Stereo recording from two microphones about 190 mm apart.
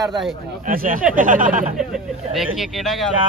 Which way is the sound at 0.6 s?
45° right (ahead or behind).